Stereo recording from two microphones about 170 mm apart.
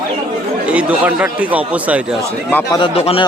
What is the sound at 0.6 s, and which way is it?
Speech, 5° right (ahead or behind).